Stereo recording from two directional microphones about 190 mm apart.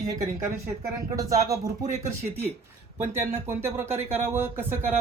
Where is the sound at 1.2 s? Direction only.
15° right (ahead or behind).